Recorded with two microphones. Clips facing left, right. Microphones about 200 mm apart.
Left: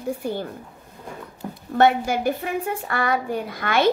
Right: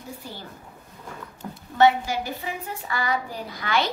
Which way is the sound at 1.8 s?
55° left (ahead or behind).